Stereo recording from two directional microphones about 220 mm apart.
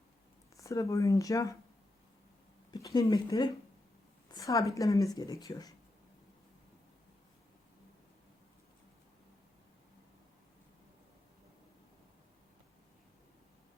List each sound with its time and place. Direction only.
0.5 s speech: 15° left (ahead or behind)
2.7 s speech: 15° left (ahead or behind)